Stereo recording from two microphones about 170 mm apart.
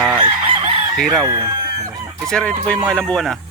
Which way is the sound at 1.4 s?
35° right (ahead or behind).